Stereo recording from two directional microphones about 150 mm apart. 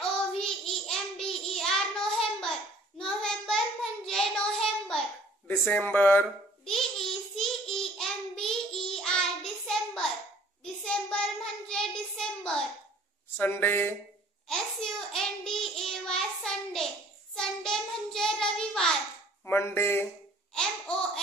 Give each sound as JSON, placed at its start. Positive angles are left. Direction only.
{"t": 0.0, "sound": "child singing", "side_deg": 5}
{"t": 5.5, "sound": "speech", "side_deg": 10}
{"t": 6.7, "sound": "child singing", "side_deg": 5}
{"t": 13.4, "sound": "speech", "side_deg": 15}
{"t": 14.5, "sound": "child singing", "side_deg": 5}
{"t": 19.4, "sound": "a sound", "side_deg": 15}
{"t": 20.5, "sound": "laughter", "side_deg": 5}